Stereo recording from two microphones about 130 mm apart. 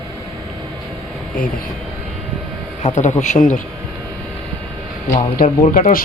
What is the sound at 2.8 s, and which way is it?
Speech, 65° left (ahead or behind).